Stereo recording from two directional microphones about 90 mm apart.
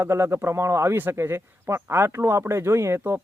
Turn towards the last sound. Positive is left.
turn(degrees=-30)  # may be behind; listen again after turning